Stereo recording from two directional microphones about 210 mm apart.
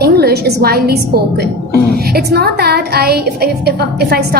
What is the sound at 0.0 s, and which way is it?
A woman's voice, 50° right (ahead or behind).